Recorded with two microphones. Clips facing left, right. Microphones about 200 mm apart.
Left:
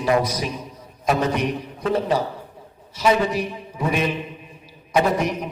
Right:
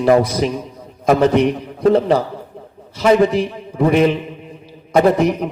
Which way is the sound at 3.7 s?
60° right (ahead or behind).